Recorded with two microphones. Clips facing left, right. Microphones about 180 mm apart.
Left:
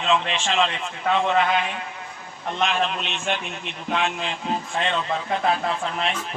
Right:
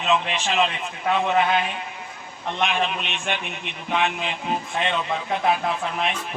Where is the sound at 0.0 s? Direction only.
10° right (ahead or behind).